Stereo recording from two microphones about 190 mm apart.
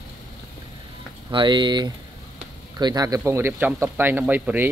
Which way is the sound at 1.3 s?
25° right (ahead or behind).